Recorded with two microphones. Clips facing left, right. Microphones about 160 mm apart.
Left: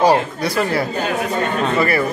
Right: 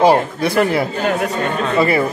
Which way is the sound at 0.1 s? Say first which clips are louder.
Right 2 dB; 20° right (ahead or behind).